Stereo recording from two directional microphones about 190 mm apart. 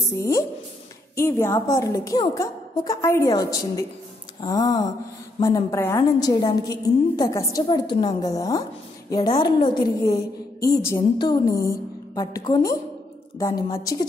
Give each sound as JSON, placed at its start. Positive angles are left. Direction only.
{"t": 0.1, "sound": "a woman's voice", "side_deg": 15}